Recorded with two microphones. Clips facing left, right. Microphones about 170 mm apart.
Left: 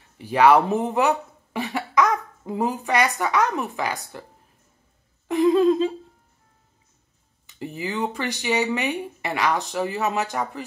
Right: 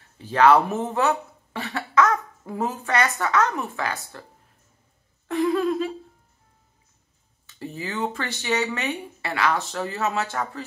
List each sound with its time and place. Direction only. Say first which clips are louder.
0.2 s speech: left 1 dB; 15° left (ahead or behind)
5.3 s a sound: left 5 dB; 20° left (ahead or behind)
7.4 s speech: left 3 dB; 15° left (ahead or behind)